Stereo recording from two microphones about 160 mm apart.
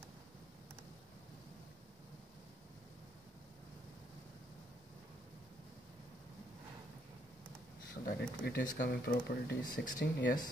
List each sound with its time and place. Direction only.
8.0 s speech: 60° left (ahead or behind)